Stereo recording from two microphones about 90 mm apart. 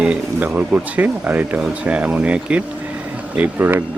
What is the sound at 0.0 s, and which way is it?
Speech, 15° right (ahead or behind).